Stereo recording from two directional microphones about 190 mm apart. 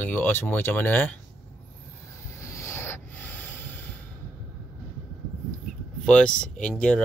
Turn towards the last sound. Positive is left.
turn(degrees=5)  # may be behind; listen again after turning